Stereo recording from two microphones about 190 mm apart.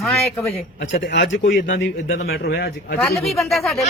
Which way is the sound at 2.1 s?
55° left (ahead or behind).